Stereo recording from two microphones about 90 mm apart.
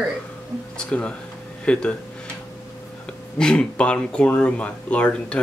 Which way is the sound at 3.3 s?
10° left (ahead or behind).